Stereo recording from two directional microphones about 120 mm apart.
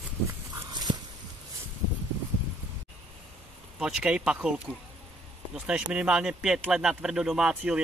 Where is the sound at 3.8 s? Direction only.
5° right (ahead or behind).